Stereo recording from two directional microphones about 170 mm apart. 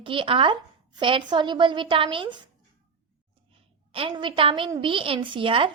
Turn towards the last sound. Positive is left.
turn(degrees=-30)  # may be behind; listen again after turning